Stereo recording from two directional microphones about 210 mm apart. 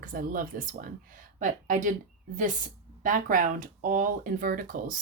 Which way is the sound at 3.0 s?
40° right (ahead or behind).